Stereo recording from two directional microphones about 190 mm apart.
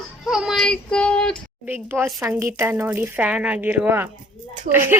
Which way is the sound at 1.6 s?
10° right (ahead or behind).